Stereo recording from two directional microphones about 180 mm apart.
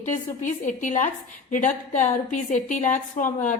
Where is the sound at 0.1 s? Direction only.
45° left (ahead or behind).